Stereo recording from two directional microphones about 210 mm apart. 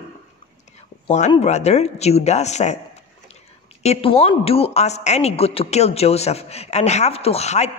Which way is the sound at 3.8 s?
30° left (ahead or behind).